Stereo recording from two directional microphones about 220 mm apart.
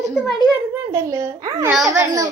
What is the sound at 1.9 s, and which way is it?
Speech, 15° right (ahead or behind).